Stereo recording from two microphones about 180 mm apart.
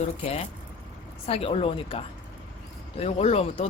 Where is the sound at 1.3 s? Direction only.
30° left (ahead or behind).